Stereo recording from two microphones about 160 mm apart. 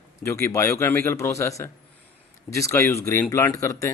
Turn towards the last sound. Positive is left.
turn(degrees=20)  # may be behind; listen again after turning